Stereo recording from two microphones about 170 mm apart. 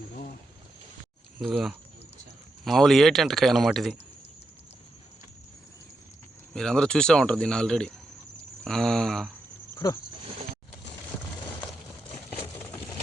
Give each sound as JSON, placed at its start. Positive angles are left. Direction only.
{"t": 1.4, "sound": "speech", "side_deg": 0}
{"t": 6.5, "sound": "speech", "side_deg": 5}
{"t": 9.7, "sound": "speech", "side_deg": 20}